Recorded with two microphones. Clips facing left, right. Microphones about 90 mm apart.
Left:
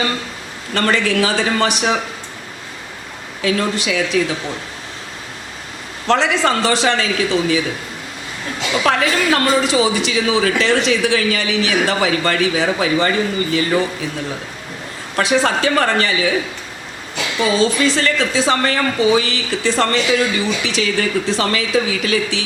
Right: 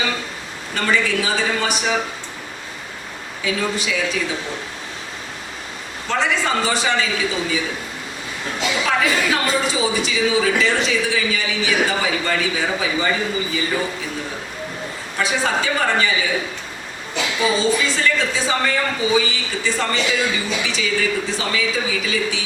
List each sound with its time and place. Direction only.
0.7 s speech: 65° left (ahead or behind)
3.4 s speech: 70° left (ahead or behind)
6.1 s speech: 85° left; by 7.6 s 65° left (ahead or behind)
8.8 s speech: 65° left (ahead or behind)
15.1 s speech: 70° left (ahead or behind)
17.4 s speech: 75° left (ahead or behind)